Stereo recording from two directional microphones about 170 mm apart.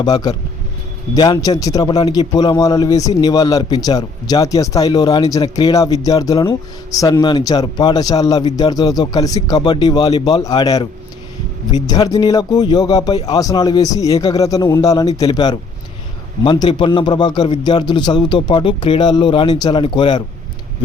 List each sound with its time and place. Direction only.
0.0 s speech: 25° left (ahead or behind)